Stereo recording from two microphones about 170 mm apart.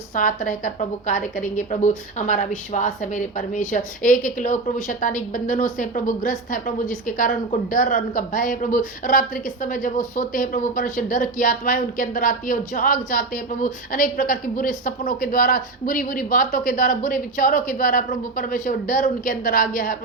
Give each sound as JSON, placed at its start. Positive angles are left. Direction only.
{"t": 0.1, "sound": "a woman's voice", "side_deg": 50}